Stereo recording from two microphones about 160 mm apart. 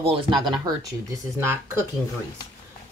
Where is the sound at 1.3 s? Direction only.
15° right (ahead or behind).